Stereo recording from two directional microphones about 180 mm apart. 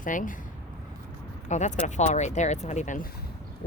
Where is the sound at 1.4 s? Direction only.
40° left (ahead or behind).